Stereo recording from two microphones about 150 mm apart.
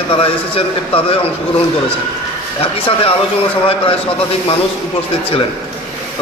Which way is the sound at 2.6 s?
40° left (ahead or behind).